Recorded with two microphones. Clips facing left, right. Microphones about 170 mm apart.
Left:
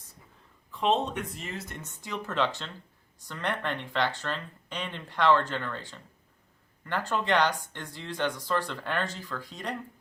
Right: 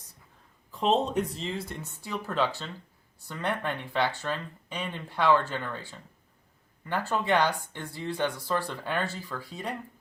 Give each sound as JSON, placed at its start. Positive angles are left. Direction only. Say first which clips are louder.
{"t": 0.7, "sound": "speech", "louder": "right 1 dB", "side_deg": -35}
{"t": 1.8, "sound": "speech", "louder": "right 3 dB", "side_deg": 15}
{"t": 2.0, "sound": "speech", "louder": "right 1 dB", "side_deg": -5}
{"t": 7.1, "sound": "speech", "louder": "even", "side_deg": -10}